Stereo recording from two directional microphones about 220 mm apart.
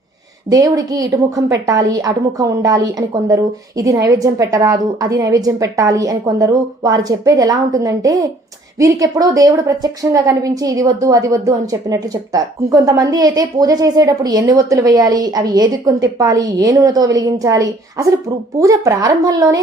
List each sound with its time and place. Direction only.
0.5 s a woman's voice: 15° right (ahead or behind)